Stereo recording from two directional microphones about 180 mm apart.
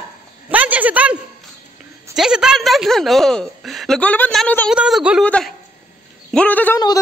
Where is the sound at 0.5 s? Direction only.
10° right (ahead or behind).